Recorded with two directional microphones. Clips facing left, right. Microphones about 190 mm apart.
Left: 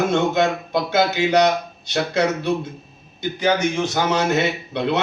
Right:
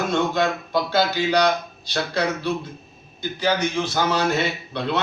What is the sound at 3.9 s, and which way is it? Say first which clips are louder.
A man's voice: left 1 dB; 20° left (ahead or behind).